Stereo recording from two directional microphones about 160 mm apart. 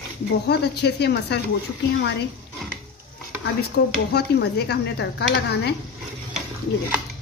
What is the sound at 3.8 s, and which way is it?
A woman's voice, 90° left.